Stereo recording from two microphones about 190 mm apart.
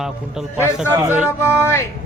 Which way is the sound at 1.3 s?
15° left (ahead or behind).